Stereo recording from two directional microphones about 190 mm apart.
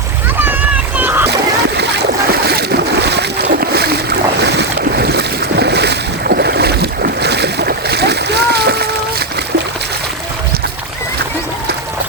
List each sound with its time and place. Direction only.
0.9 s splash: 10° right (ahead or behind)
1.7 s boat: 60° right (ahead or behind)